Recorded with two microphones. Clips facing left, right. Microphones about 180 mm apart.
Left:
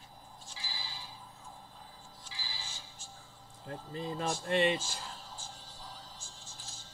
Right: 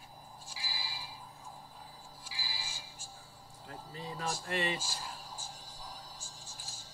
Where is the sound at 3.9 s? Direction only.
30° left (ahead or behind).